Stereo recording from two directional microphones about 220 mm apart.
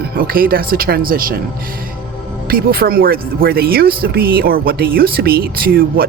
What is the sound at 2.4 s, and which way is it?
Speech, 40° right (ahead or behind).